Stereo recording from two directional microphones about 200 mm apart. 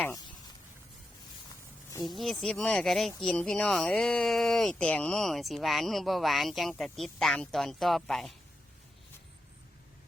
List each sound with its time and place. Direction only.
2.0 s speech: centre (ahead or behind)